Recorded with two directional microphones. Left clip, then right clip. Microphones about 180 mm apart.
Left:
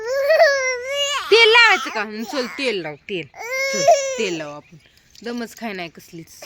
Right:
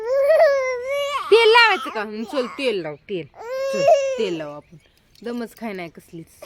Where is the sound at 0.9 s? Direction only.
15° right (ahead or behind).